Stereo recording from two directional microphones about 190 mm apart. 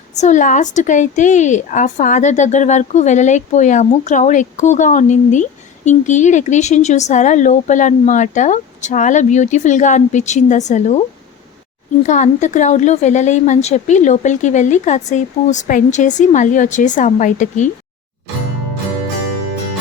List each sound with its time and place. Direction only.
0.1 s a woman's voice: 40° left (ahead or behind)
12.0 s a woman's voice: 40° left (ahead or behind)